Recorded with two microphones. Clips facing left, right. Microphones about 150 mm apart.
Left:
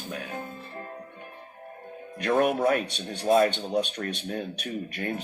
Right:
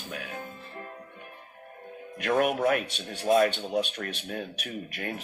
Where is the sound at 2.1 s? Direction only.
35° left (ahead or behind).